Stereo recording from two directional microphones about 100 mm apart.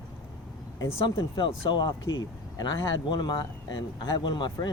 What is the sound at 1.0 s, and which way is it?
Speech, 50° left (ahead or behind).